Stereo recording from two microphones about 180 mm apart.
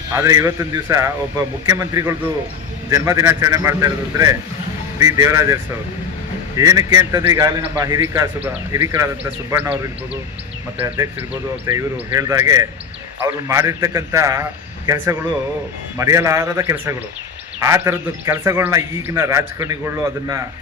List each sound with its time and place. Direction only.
0.1 s a man's voice: 15° right (ahead or behind)
6.6 s a man's voice: 20° right (ahead or behind)